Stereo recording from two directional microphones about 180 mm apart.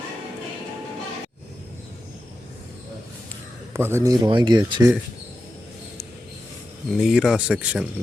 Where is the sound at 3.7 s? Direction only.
15° right (ahead or behind).